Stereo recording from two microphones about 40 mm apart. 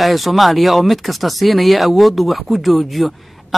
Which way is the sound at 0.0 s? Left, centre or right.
Centre.